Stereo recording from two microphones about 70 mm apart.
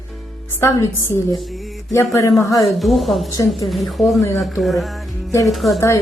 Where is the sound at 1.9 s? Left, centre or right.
Left.